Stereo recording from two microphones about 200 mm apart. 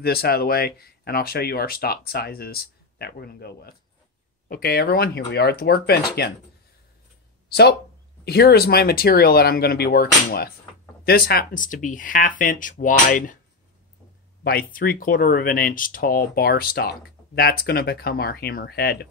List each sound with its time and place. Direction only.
0.0 s speech: 50° left (ahead or behind)
7.4 s speech: 55° left (ahead or behind)
14.4 s speech: 50° left (ahead or behind)